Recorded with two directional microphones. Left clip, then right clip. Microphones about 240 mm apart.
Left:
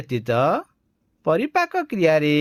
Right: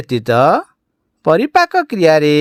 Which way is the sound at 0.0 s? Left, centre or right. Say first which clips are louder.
Right 9 dB; right.